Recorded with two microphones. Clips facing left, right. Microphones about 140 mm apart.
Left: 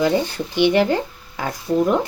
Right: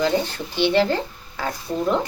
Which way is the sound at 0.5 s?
15° left (ahead or behind).